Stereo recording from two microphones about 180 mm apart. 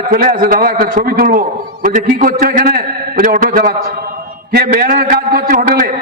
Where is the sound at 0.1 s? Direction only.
55° right (ahead or behind).